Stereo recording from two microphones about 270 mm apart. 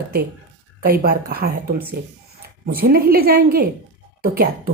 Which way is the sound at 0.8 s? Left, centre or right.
Right.